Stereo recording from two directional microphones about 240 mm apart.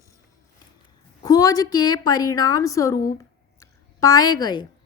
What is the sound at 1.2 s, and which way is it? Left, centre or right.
A woman's voice, centre.